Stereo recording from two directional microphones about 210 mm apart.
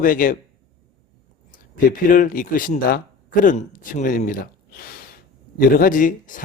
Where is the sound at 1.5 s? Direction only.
40° left (ahead or behind).